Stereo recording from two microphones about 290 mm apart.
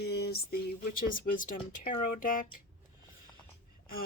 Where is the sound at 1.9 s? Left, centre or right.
Left.